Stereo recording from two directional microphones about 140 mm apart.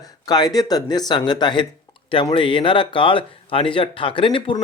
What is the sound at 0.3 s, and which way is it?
Speech, 30° left (ahead or behind).